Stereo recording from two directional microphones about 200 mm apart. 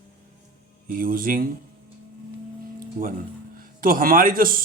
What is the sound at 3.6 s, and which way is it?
Speech, 45° right (ahead or behind).